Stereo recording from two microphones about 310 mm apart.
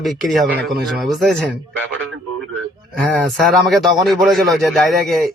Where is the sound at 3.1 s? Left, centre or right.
Centre.